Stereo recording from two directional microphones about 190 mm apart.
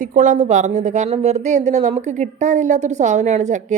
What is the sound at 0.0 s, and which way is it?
Speech, 45° right (ahead or behind).